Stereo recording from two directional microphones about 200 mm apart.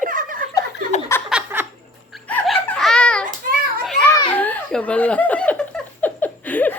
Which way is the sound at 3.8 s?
Centre (ahead or behind).